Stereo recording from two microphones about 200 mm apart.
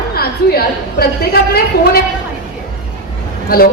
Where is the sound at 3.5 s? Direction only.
45° left (ahead or behind).